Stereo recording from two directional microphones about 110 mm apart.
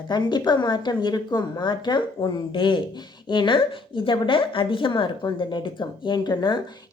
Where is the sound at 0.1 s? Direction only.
40° left (ahead or behind).